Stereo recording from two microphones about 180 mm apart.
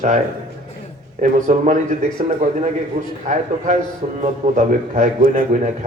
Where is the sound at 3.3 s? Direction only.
40° right (ahead or behind).